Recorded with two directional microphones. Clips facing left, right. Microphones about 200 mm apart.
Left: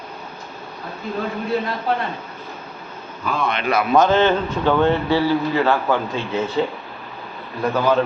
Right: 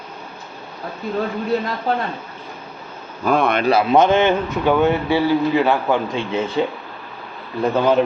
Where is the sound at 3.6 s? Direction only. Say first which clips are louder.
Even; 25° right (ahead or behind).